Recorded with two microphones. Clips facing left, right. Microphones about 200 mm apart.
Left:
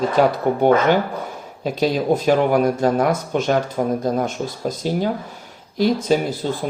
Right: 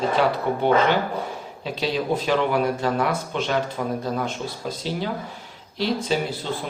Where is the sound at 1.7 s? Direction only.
45° left (ahead or behind).